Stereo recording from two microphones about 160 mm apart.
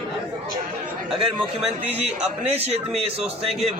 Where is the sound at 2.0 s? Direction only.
40° right (ahead or behind).